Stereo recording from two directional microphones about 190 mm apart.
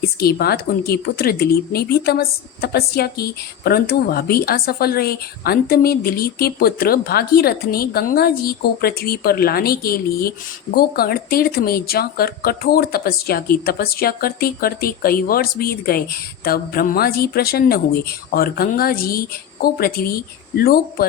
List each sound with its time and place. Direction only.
0.0 s speech: 55° left (ahead or behind)